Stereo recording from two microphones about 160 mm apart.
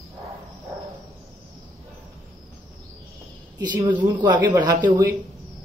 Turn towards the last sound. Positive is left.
turn(degrees=-25)  # may be behind; listen again after turning